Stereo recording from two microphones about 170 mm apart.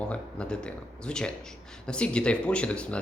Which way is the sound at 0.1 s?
5° left (ahead or behind).